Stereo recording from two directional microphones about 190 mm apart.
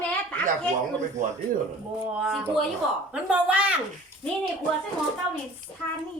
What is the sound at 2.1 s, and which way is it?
A man's voice, centre (ahead or behind).